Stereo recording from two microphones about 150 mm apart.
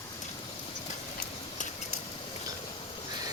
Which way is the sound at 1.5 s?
55° left (ahead or behind).